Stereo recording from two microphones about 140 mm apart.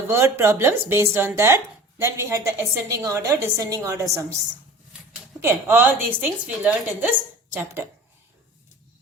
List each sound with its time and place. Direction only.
0.3 s a woman's voice: 15° right (ahead or behind)
5.4 s a woman's voice: 15° right (ahead or behind)